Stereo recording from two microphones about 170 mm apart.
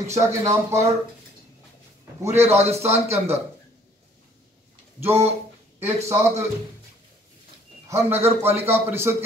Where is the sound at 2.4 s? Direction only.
40° right (ahead or behind).